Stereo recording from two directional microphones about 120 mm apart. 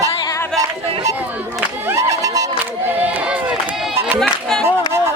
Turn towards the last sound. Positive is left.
turn(degrees=5)  # may be behind; listen again after turning